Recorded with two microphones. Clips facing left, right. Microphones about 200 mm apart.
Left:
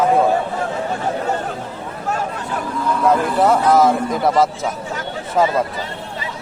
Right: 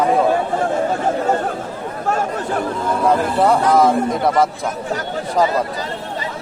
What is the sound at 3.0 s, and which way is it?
Speech, centre (ahead or behind).